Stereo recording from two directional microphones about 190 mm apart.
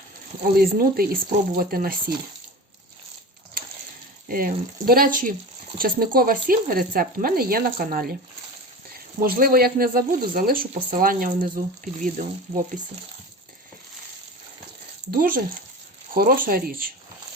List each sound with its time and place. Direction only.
0.5 s speech: 50° right (ahead or behind)
4.3 s speech: 50° right (ahead or behind)
15.1 s speech: 50° right (ahead or behind)